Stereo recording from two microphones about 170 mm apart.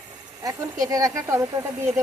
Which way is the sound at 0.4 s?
20° right (ahead or behind).